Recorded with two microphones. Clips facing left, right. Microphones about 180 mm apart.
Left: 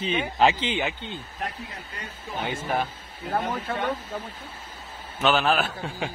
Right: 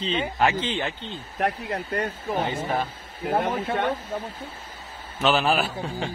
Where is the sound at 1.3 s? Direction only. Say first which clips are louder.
Right 13 dB; 65° right (ahead or behind).